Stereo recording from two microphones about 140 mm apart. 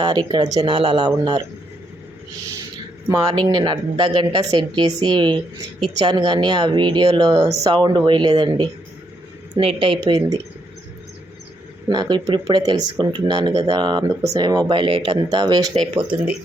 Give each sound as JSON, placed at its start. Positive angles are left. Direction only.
{"t": 0.0, "sound": "speech", "side_deg": -30}
{"t": 0.7, "sound": "a woman's voice", "side_deg": -40}
{"t": 3.3, "sound": "a woman's voice", "side_deg": -30}
{"t": 11.9, "sound": "a woman's voice", "side_deg": -30}